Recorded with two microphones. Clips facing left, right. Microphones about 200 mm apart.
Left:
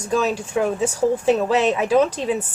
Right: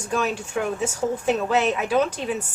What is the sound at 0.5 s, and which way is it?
A woman's voice, 30° left (ahead or behind).